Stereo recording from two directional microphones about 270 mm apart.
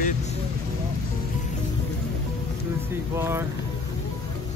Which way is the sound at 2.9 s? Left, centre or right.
Centre.